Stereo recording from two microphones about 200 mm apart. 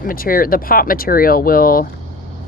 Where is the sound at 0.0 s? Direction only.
45° left (ahead or behind).